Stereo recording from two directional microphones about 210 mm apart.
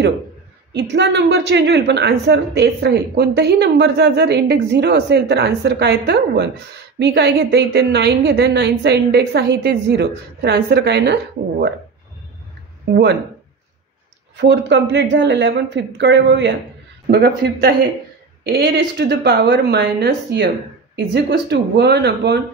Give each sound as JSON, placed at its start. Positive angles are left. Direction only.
{"t": 0.7, "sound": "a woman's voice", "side_deg": -55}
{"t": 12.9, "sound": "a woman's voice", "side_deg": -50}
{"t": 14.3, "sound": "a woman's voice", "side_deg": -55}